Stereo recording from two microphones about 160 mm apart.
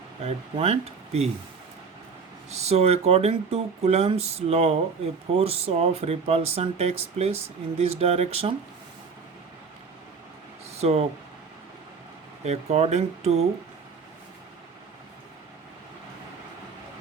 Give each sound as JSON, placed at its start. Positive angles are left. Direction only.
{"t": 0.2, "sound": "speech", "side_deg": -40}
{"t": 2.5, "sound": "speech", "side_deg": -40}
{"t": 10.8, "sound": "speech", "side_deg": -40}
{"t": 12.5, "sound": "speech", "side_deg": -40}